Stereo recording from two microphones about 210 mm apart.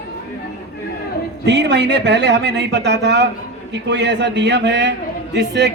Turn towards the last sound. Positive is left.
turn(degrees=-55)  # may be behind; listen again after turning